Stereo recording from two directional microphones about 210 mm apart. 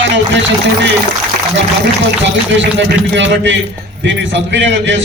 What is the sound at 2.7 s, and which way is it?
A man's voice, 60° right (ahead or behind).